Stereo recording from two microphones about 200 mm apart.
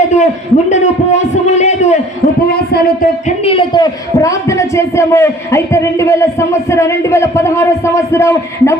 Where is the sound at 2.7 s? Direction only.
45° left (ahead or behind).